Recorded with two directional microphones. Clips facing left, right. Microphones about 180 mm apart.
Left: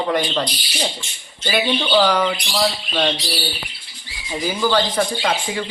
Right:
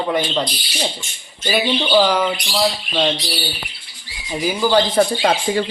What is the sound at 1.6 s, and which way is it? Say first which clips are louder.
Bird: right 1 dB; 15° right (ahead or behind).